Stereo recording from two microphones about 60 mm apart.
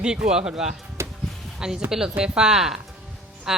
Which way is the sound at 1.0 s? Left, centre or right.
Right.